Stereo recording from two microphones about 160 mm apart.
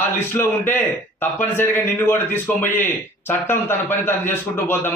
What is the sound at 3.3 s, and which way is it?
A man's voice, 15° left (ahead or behind).